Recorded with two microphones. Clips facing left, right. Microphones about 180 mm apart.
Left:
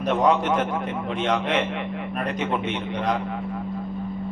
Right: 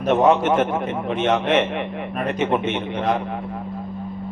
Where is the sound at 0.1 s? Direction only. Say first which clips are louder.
Right 4 dB; 25° right (ahead or behind).